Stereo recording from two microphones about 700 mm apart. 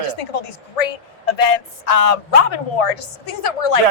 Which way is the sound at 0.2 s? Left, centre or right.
Left.